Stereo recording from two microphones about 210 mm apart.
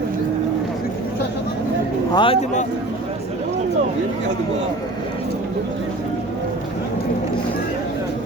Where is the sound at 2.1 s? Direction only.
25° left (ahead or behind).